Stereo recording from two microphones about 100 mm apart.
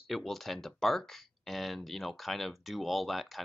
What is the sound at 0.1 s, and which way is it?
Speech, centre (ahead or behind).